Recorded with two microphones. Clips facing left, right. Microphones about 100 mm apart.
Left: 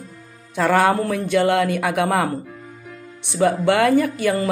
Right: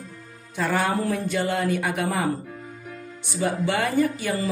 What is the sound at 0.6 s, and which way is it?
A woman's voice, 90° left.